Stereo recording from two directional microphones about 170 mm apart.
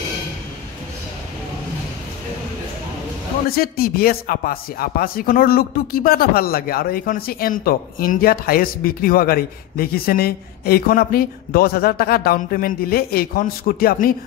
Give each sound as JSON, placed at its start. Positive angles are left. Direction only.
{"t": 3.4, "sound": "speech", "side_deg": 60}